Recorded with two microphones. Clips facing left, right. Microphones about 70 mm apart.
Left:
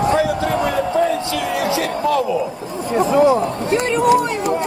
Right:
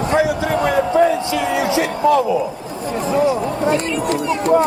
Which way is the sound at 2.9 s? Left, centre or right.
Left.